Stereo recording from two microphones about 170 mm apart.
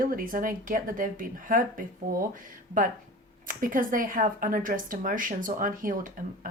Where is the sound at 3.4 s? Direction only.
55° right (ahead or behind).